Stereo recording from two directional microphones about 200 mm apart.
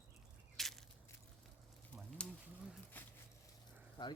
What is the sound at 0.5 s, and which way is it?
Crushing, centre (ahead or behind).